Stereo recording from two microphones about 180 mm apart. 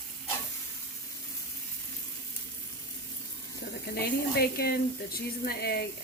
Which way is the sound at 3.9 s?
60° left (ahead or behind).